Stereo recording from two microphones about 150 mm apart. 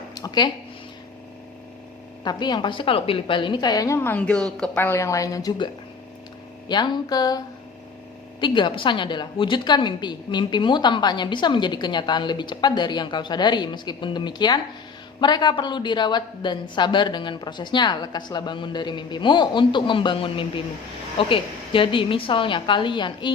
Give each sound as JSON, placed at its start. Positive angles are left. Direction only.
{"t": 0.1, "sound": "speech", "side_deg": 25}
{"t": 2.2, "sound": "a woman's voice", "side_deg": 30}